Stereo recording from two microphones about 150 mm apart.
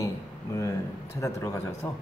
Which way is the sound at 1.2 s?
20° left (ahead or behind).